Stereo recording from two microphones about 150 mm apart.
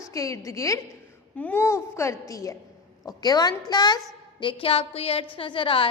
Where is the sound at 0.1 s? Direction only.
20° left (ahead or behind).